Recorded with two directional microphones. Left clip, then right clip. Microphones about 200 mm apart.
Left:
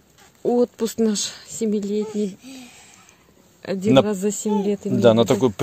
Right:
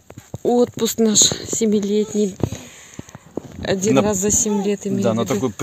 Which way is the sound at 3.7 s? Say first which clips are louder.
Even; 25° right (ahead or behind).